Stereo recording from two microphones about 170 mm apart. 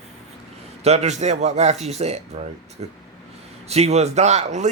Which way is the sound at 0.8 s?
40° right (ahead or behind).